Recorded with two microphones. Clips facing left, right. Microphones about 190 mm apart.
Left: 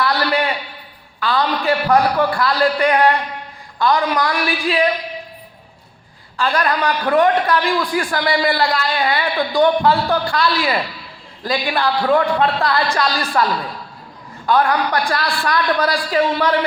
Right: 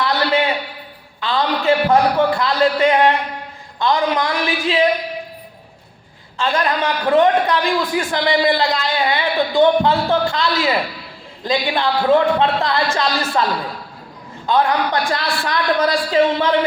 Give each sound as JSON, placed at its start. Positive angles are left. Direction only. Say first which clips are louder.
{"t": 0.0, "sound": "a sound", "louder": "right 1 dB", "side_deg": -20}
{"t": 1.2, "sound": "a man's voice", "louder": "even", "side_deg": -20}
{"t": 6.3, "sound": "a man's voice", "louder": "even", "side_deg": -20}
{"t": 14.4, "sound": "a man's voice", "louder": "even", "side_deg": -20}